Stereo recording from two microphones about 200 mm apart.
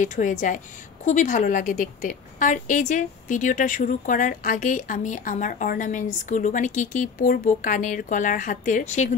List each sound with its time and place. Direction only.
0.0 s a woman's voice: 40° left (ahead or behind)